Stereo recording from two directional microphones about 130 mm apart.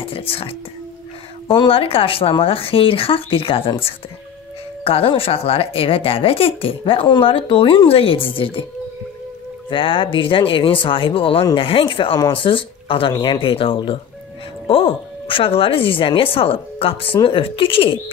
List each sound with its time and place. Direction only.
0.3 s speech: 45° left (ahead or behind)
9.7 s speech: 40° left (ahead or behind)